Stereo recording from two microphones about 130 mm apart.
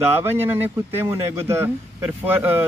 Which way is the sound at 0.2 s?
15° right (ahead or behind).